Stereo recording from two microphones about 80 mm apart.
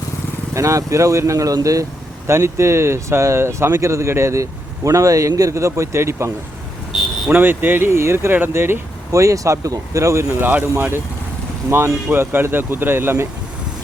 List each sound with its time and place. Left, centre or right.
0.5 s speech: right
7.3 s speech: right
10.4 s speech: right
12.1 s speech: right